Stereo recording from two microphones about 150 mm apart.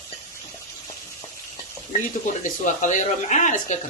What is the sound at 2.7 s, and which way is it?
Speech, 55° left (ahead or behind).